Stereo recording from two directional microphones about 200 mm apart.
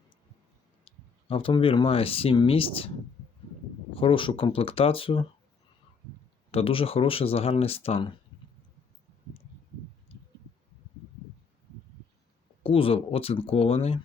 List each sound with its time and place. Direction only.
0.9 s speech: 25° left (ahead or behind)
3.9 s speech: 25° left (ahead or behind)
6.5 s speech: 30° left (ahead or behind)
12.6 s speech: 25° left (ahead or behind)